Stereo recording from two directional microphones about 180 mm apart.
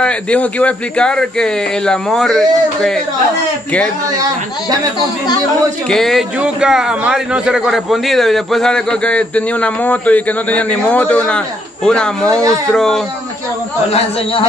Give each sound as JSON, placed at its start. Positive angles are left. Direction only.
{"t": 0.0, "sound": "a man's voice", "side_deg": 5}
{"t": 5.9, "sound": "a man's voice", "side_deg": 0}
{"t": 12.3, "sound": "speech", "side_deg": -20}
{"t": 12.7, "sound": "a man's voice", "side_deg": 0}